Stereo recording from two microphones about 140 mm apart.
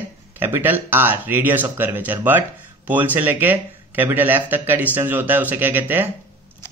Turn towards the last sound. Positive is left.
turn(degrees=-15)  # may be behind; listen again after turning